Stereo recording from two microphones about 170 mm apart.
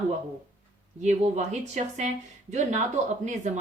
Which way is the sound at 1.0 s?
40° right (ahead or behind).